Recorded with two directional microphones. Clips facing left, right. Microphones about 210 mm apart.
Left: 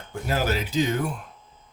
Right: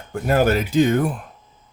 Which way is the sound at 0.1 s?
55° right (ahead or behind).